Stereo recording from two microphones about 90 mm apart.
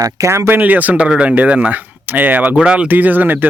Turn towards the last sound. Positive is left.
turn(degrees=-20)  # may be behind; listen again after turning